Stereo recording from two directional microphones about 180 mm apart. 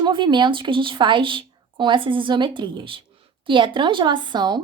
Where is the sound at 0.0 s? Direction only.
25° right (ahead or behind).